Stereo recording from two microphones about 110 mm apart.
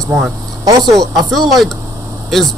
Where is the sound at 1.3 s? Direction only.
Centre (ahead or behind).